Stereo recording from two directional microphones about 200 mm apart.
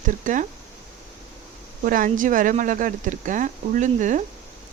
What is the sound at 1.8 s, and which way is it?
Speech, 45° right (ahead or behind).